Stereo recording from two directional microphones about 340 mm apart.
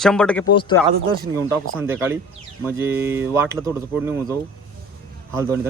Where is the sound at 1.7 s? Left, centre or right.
Centre.